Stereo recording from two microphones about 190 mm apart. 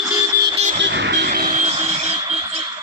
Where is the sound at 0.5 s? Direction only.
35° right (ahead or behind).